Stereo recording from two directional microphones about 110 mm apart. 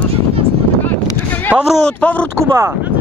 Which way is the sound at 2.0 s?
10° left (ahead or behind).